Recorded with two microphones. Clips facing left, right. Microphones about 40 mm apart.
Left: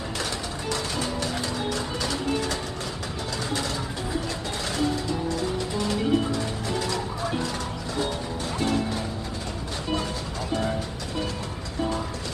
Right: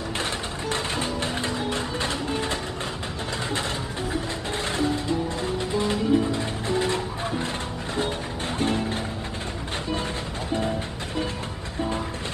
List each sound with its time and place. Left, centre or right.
0.7 s music: right
4.7 s music: right
8.5 s music: right